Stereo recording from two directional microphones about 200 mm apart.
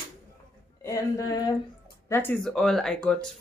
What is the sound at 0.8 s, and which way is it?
Music, 15° left (ahead or behind).